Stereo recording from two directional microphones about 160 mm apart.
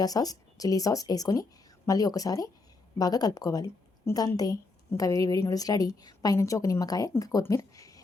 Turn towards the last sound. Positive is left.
turn(degrees=20)  # may be behind; listen again after turning